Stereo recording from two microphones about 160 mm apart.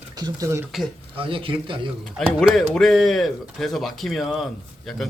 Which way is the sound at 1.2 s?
35° right (ahead or behind).